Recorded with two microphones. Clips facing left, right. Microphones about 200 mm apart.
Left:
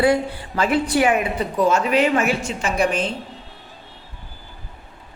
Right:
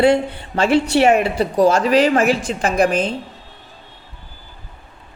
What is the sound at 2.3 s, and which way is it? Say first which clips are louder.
Speech: right 4 dB; 90° right.